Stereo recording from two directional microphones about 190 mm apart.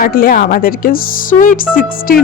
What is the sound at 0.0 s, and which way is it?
A woman's voice, 50° left (ahead or behind).